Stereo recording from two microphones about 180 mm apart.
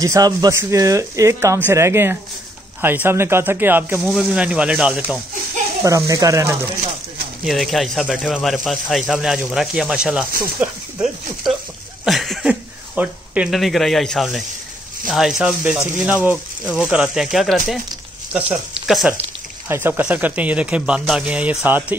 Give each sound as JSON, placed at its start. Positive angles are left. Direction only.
{"t": 0.0, "sound": "speech", "side_deg": -20}
{"t": 5.9, "sound": "speech", "side_deg": -15}
{"t": 7.4, "sound": "speech", "side_deg": 0}